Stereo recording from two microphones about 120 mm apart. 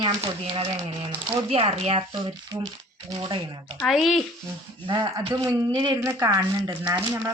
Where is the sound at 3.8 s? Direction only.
Centre (ahead or behind).